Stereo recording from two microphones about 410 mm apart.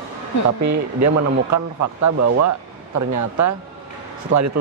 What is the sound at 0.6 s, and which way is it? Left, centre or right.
Speech, right.